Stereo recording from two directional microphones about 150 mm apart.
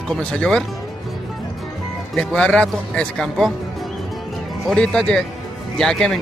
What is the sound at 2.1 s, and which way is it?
A man's voice, 5° left (ahead or behind).